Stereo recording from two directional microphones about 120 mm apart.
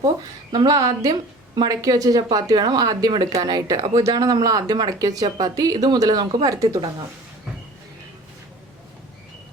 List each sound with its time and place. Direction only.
0.5 s speech: 30° right (ahead or behind)